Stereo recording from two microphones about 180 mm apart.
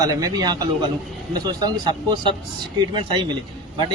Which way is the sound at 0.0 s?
20° right (ahead or behind).